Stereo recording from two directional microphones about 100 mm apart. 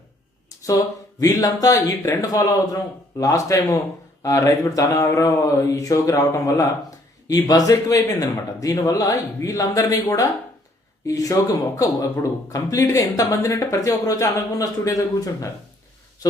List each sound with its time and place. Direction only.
0.6 s speech: 35° left (ahead or behind)